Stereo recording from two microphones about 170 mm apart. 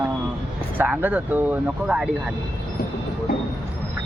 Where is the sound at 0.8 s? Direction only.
10° right (ahead or behind).